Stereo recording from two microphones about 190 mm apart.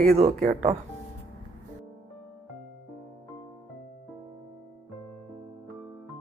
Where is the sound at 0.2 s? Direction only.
40° right (ahead or behind).